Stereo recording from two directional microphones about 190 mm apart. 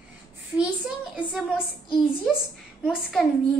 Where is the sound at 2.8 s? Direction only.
Centre (ahead or behind).